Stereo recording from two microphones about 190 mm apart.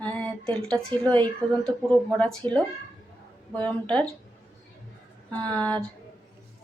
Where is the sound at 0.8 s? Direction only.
25° right (ahead or behind).